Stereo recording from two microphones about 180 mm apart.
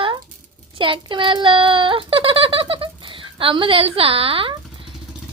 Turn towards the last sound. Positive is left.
turn(degrees=-30)  # may be behind; listen again after turning